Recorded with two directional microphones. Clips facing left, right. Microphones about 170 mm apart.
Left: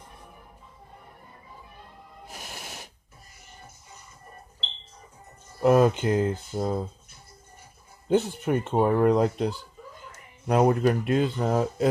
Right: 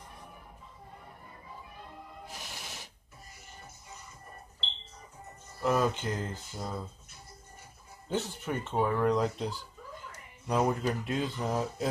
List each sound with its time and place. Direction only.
2.4 s music: 55° left (ahead or behind)
5.6 s speech: 60° left (ahead or behind)
8.1 s speech: 60° left (ahead or behind)